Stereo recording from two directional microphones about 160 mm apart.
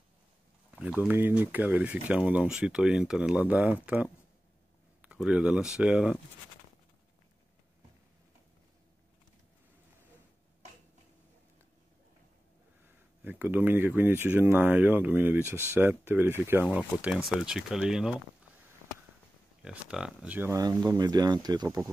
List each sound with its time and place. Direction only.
0.7 s speech: 10° right (ahead or behind)
13.2 s speech: 10° right (ahead or behind)
19.6 s speech: 5° right (ahead or behind); by 21.9 s 20° right (ahead or behind)